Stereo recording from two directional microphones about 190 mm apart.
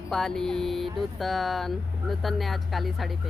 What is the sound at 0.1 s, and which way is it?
Speech, centre (ahead or behind).